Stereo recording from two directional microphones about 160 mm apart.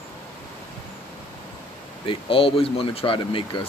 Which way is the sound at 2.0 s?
35° left (ahead or behind).